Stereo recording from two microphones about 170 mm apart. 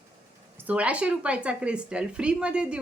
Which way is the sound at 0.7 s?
10° right (ahead or behind).